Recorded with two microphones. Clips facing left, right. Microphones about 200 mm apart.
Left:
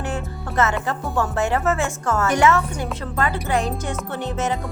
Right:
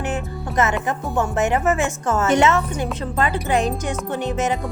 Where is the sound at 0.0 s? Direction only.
20° right (ahead or behind).